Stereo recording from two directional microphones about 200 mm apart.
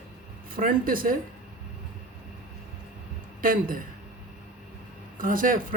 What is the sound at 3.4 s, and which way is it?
Speech, 45° right (ahead or behind).